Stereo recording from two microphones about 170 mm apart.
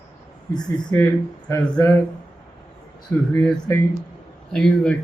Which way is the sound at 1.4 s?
15° left (ahead or behind).